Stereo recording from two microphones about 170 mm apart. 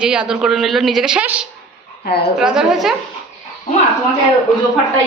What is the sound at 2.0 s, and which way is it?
Speech, 70° left (ahead or behind).